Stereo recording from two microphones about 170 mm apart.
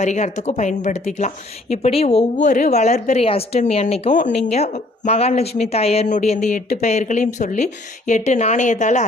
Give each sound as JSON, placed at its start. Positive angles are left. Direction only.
{"t": 0.0, "sound": "a woman's voice", "side_deg": 45}